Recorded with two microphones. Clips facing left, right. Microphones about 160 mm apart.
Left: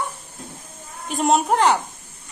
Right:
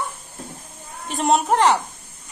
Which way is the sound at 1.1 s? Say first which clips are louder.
Even; centre (ahead or behind).